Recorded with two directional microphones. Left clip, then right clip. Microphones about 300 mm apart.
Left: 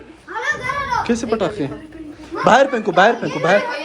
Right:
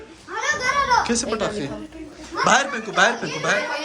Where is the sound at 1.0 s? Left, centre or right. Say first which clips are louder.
Left 4 dB; centre.